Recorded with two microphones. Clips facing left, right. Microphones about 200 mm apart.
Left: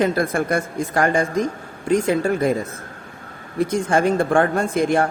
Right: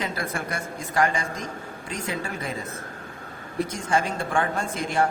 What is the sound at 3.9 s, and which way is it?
A woman's voice, 50° left (ahead or behind).